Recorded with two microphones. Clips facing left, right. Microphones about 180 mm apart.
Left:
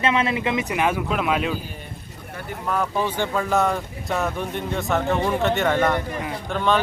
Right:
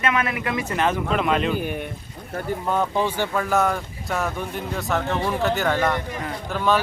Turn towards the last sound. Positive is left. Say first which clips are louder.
# even
turn(degrees=-5)  # may be behind; listen again after turning